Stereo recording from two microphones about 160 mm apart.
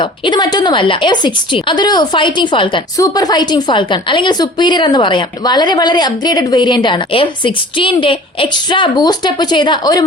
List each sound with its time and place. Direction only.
0.0 s a woman's voice: 25° left (ahead or behind)